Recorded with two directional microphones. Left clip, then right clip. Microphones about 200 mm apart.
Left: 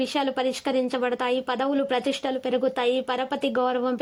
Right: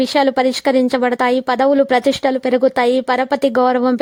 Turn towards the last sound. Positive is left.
turn(degrees=-50)  # may be behind; listen again after turning